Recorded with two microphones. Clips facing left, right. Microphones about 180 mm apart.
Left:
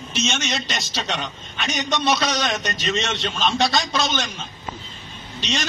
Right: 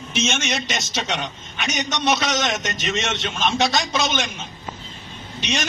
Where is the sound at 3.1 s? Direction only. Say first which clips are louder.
Even; centre (ahead or behind).